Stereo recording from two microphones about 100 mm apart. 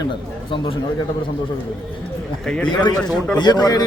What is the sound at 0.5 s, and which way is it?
Speech, 60° left (ahead or behind).